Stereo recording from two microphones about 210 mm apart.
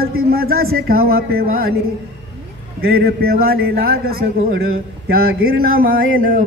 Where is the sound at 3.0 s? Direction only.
45° right (ahead or behind).